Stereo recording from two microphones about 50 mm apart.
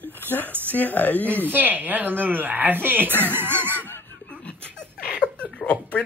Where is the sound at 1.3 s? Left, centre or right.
Right.